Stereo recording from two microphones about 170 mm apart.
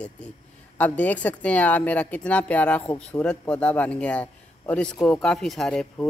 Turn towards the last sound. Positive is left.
turn(degrees=0)  # may be behind; listen again after turning